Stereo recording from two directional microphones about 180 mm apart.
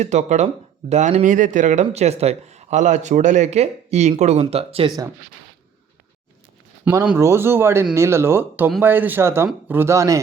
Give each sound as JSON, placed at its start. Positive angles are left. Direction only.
{"t": 0.0, "sound": "speech", "side_deg": -40}
{"t": 6.8, "sound": "speech", "side_deg": -10}